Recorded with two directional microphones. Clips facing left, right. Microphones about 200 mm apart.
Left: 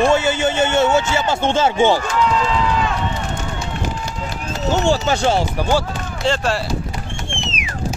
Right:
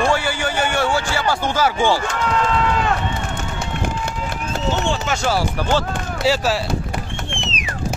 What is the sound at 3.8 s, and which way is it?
Run, 55° right (ahead or behind).